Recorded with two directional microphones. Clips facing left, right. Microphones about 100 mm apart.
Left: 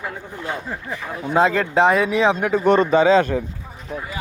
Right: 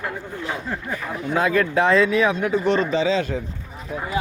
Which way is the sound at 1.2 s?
25° left (ahead or behind).